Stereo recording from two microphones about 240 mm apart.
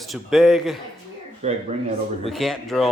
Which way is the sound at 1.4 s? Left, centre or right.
Right.